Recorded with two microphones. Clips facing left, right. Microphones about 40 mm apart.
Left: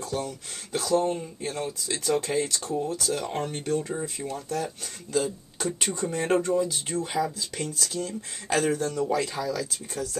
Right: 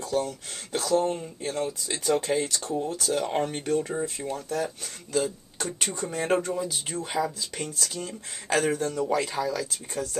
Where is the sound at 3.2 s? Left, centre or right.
Centre.